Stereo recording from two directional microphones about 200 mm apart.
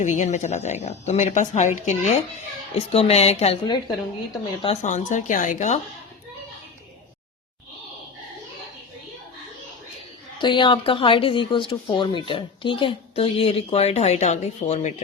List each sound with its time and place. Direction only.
0.0 s speech: 35° left (ahead or behind)
4.6 s speech: 35° left (ahead or behind)
10.3 s speech: 25° left (ahead or behind)